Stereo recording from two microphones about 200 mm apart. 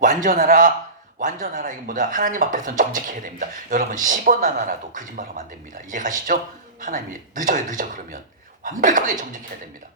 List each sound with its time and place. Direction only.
0.0 s a man's voice: 40° right (ahead or behind)